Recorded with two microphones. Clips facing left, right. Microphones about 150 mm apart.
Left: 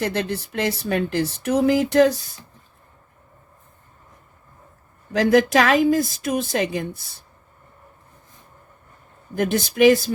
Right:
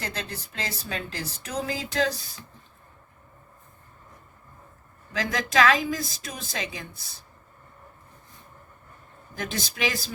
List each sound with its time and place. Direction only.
0.0 s speech: 65° left (ahead or behind)
5.1 s speech: 60° left (ahead or behind)
9.3 s speech: 60° left (ahead or behind)